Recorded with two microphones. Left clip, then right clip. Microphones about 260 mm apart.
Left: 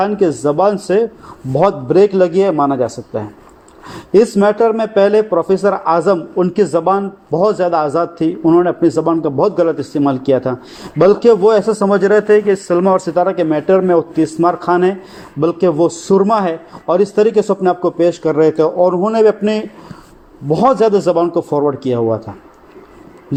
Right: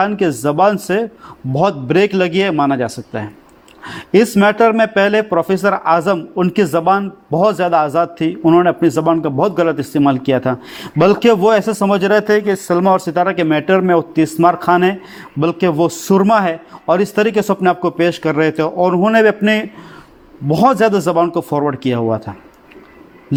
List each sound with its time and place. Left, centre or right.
0.0 s a man's voice: right
2.5 s a man's voice: right
2.7 s a man's voice: right